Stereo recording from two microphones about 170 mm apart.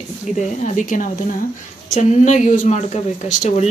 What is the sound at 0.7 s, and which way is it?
A woman's voice, 50° left (ahead or behind).